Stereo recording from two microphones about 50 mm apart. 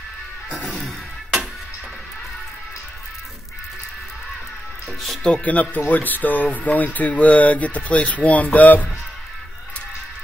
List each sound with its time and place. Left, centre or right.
0.7 s music: centre
5.2 s speech: left